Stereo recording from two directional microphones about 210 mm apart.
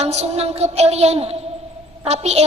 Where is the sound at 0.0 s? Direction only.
30° right (ahead or behind).